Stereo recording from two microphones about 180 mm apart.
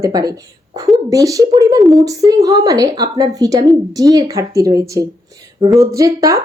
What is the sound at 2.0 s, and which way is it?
Speech, 20° right (ahead or behind).